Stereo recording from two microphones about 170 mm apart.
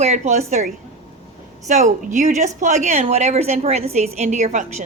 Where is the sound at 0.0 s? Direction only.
40° right (ahead or behind).